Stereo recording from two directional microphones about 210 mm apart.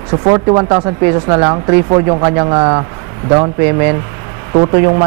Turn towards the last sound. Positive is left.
turn(degrees=-25)  # may be behind; listen again after turning